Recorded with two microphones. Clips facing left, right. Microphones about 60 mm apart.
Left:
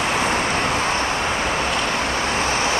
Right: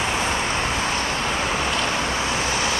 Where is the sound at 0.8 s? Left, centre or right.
Left.